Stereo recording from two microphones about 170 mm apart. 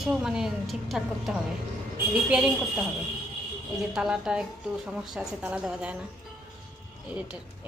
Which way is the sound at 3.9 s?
5° right (ahead or behind).